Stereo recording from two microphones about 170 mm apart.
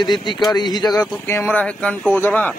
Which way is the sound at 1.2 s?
15° left (ahead or behind).